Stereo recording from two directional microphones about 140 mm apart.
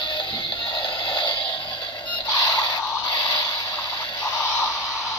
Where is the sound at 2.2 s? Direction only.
30° left (ahead or behind).